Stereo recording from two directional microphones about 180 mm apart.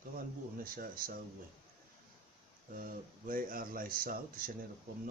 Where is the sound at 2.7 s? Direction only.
50° right (ahead or behind).